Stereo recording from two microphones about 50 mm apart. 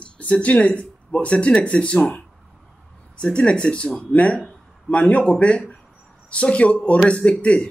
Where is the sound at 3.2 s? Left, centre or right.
Left.